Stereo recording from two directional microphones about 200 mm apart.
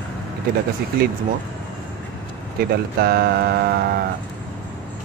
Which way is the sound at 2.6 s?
50° right (ahead or behind).